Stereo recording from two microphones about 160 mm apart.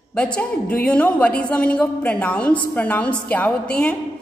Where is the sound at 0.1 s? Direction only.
10° left (ahead or behind).